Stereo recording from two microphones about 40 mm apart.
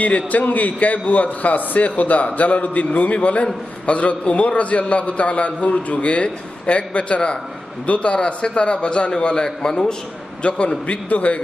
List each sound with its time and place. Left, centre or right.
0.0 s a man's voice: left